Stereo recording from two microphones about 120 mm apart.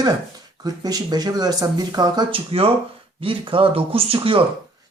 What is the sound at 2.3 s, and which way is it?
Speech, 55° right (ahead or behind).